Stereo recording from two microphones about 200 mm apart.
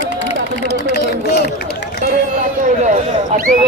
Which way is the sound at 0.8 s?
50° left (ahead or behind).